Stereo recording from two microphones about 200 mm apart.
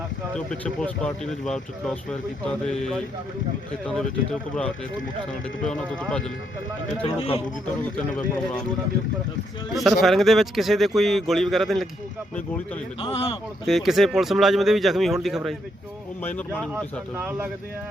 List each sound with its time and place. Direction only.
0.3 s speech: 5° left (ahead or behind)
7.0 s speech: 25° left (ahead or behind)
9.7 s speech: centre (ahead or behind)
13.0 s speech: 30° left (ahead or behind)
13.7 s speech: centre (ahead or behind)
17.2 s a man's voice: 10° right (ahead or behind)